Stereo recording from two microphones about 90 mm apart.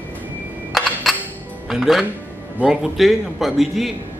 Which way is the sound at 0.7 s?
Centre (ahead or behind).